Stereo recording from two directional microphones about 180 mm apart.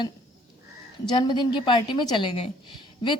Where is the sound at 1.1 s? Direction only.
25° left (ahead or behind).